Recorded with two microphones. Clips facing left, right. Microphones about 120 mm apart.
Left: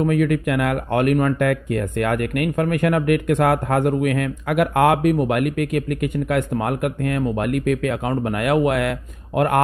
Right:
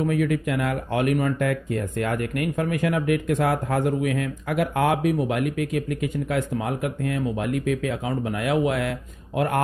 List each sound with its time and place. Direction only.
0.1 s speech: 60° left (ahead or behind)